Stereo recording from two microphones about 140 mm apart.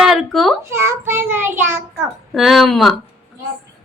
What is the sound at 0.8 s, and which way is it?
Child singing, 15° right (ahead or behind).